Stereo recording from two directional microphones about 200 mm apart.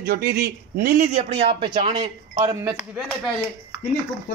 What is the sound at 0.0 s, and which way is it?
A man's voice, 50° right (ahead or behind).